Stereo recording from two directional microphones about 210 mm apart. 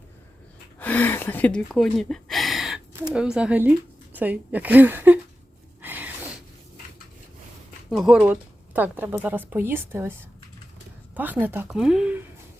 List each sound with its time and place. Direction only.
0.8 s gasp: 10° left (ahead or behind)
3.1 s speech: 5° right (ahead or behind)
5.8 s a sound: 10° right (ahead or behind)
7.9 s speech: centre (ahead or behind)